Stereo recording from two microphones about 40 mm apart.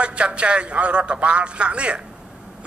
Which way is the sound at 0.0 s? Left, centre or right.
Right.